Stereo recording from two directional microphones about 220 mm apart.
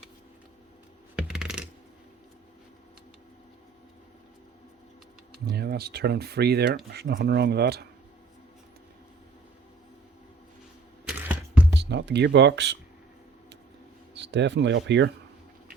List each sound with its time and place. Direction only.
1.1 s coin: 5° right (ahead or behind)
5.3 s speech: 45° right (ahead or behind)
11.2 s music: 5° right (ahead or behind)
11.8 s speech: 50° right (ahead or behind)
14.1 s speech: 50° right (ahead or behind)